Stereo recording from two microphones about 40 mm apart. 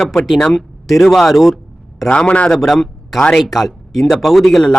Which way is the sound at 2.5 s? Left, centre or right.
Centre.